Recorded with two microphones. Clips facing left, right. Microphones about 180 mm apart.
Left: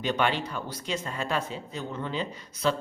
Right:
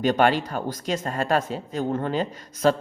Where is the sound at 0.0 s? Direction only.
45° right (ahead or behind).